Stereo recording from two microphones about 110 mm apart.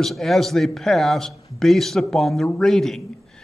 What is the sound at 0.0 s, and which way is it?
A man's voice, centre (ahead or behind).